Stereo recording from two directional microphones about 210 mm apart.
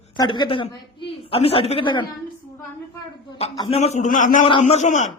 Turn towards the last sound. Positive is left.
turn(degrees=35)  # may be behind; listen again after turning